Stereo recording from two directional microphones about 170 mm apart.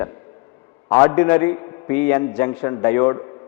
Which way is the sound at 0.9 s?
20° left (ahead or behind).